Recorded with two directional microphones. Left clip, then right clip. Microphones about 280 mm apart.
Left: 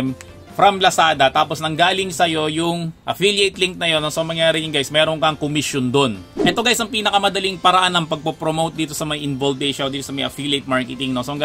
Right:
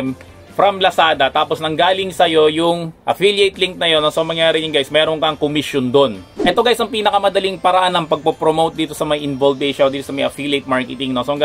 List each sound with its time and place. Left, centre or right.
0.6 s speech: left